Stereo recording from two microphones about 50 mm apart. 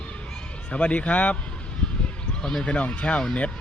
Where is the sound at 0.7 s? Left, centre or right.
Left.